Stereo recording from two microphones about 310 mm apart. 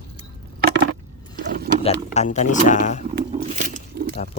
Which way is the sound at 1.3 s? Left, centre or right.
Right.